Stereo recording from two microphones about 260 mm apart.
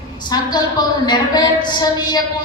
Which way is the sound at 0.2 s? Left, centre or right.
Centre.